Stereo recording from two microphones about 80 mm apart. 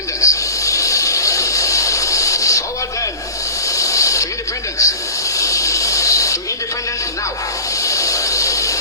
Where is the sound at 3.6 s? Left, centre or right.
Left.